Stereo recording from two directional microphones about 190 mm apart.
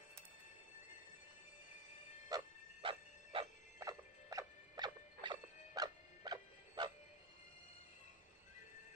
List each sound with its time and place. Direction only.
2.2 s dog: 20° right (ahead or behind)